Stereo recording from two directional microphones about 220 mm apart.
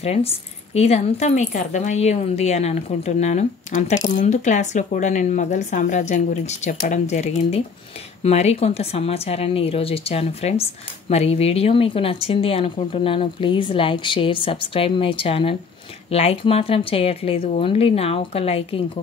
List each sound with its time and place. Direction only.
0.0 s a woman's voice: 30° left (ahead or behind)